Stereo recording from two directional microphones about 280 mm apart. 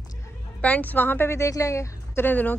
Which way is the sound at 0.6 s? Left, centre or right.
Centre.